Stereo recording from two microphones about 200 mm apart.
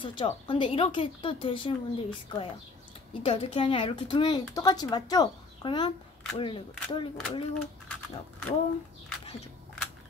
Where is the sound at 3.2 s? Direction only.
30° left (ahead or behind).